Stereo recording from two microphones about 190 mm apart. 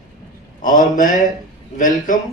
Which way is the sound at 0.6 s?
45° left (ahead or behind).